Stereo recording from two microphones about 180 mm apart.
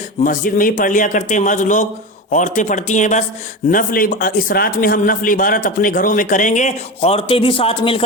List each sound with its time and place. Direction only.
0.3 s a man's voice: 50° left (ahead or behind); by 8.0 s 30° left (ahead or behind)